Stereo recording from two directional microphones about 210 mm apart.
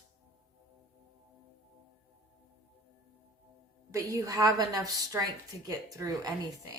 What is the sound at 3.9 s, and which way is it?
A woman's voice, 15° right (ahead or behind).